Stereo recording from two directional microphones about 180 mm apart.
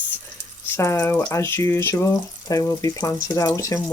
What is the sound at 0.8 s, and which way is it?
Speech, 15° left (ahead or behind).